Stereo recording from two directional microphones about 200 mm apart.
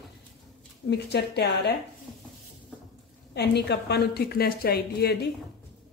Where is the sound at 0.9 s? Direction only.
55° left (ahead or behind).